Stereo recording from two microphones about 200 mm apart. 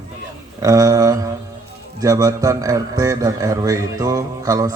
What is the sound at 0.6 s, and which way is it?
A man's voice, 15° right (ahead or behind).